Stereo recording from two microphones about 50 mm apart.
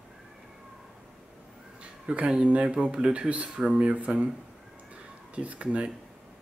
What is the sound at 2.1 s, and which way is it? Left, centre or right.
Speech, centre.